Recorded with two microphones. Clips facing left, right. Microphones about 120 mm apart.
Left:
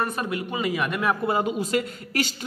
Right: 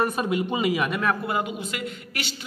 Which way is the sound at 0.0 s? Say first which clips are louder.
Right 3 dB; 15° right (ahead or behind).